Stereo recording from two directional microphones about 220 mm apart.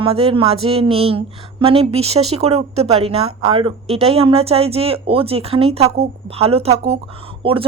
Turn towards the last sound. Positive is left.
turn(degrees=-25)  # may be behind; listen again after turning